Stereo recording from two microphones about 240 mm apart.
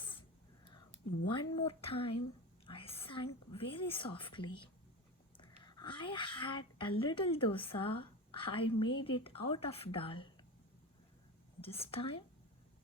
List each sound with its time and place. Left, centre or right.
0.0 s whispering: left
1.3 s speech: left
2.6 s whispering: left
3.5 s speech: left
11.6 s speech: left